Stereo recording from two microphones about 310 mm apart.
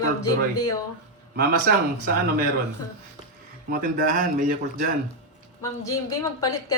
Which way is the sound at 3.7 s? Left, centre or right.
Right.